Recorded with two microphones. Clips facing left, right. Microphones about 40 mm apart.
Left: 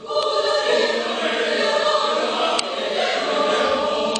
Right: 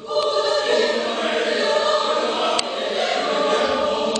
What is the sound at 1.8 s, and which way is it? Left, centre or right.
Choir, centre.